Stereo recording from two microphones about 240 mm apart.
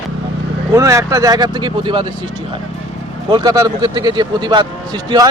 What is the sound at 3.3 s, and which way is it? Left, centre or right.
A man's voice, centre.